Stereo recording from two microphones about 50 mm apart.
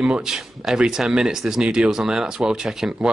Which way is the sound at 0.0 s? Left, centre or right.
Centre.